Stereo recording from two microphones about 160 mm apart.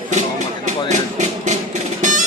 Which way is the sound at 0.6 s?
50° right (ahead or behind).